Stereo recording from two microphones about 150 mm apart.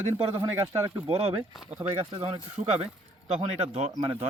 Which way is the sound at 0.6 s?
20° right (ahead or behind).